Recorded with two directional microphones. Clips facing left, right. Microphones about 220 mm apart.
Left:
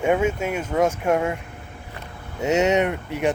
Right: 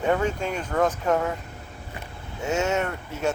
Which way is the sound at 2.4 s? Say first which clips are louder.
Left 6 dB; 20° left (ahead or behind).